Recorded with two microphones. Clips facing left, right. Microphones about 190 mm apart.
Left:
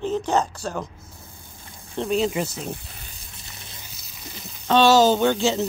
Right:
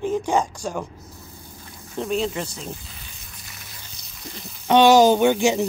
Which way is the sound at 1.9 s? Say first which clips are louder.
Left 2 dB; centre (ahead or behind).